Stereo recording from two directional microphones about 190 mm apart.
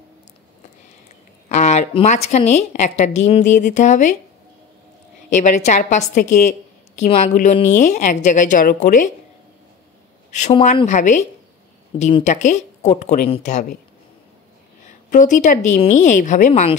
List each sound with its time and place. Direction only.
1.5 s a woman's voice: 35° left (ahead or behind)
5.3 s a woman's voice: 40° left (ahead or behind)
10.6 s a woman's voice: 35° left (ahead or behind)
14.9 s a woman's voice: 40° left (ahead or behind)